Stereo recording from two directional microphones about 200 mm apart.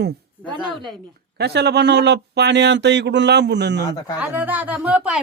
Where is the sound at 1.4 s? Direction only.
55° right (ahead or behind).